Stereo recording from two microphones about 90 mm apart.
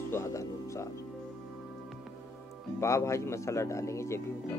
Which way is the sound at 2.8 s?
35° left (ahead or behind).